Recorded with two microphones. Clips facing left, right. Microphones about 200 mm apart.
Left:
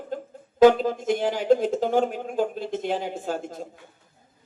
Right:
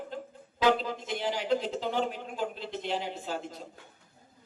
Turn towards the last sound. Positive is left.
turn(degrees=50)  # may be behind; listen again after turning